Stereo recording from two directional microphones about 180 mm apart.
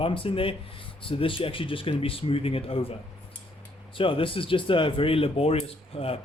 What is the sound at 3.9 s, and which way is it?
Speech, 30° left (ahead or behind).